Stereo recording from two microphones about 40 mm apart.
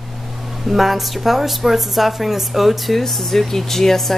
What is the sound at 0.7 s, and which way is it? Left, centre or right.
A woman's voice, centre.